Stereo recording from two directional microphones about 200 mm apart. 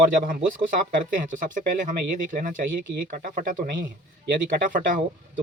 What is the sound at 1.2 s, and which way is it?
Speech, 40° right (ahead or behind).